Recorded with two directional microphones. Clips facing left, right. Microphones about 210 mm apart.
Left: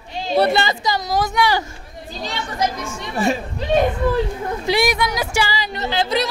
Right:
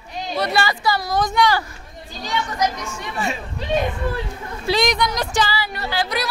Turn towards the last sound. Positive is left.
turn(degrees=25)  # may be behind; listen again after turning